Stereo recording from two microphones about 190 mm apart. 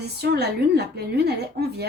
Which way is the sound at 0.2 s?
60° right (ahead or behind).